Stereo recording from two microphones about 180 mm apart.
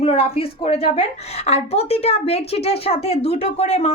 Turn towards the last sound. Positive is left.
turn(degrees=35)  # may be behind; listen again after turning